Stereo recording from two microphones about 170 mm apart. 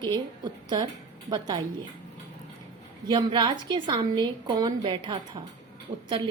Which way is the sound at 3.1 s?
25° right (ahead or behind).